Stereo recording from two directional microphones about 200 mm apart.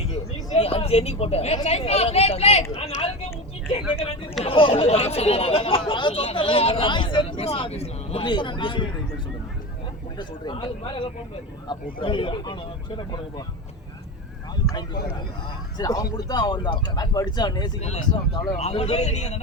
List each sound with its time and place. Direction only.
0.5 s a man's voice: 30° left (ahead or behind)
4.4 s speech: 25° left (ahead or behind)
10.2 s speech: 20° left (ahead or behind)
15.8 s a man's voice: 20° left (ahead or behind); by 19.4 s 35° left (ahead or behind)